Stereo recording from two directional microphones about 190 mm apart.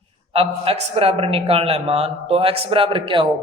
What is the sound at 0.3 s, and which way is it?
A man's voice, 35° right (ahead or behind).